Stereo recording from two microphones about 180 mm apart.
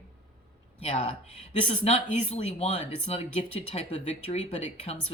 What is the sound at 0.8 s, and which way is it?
Speech, 30° left (ahead or behind).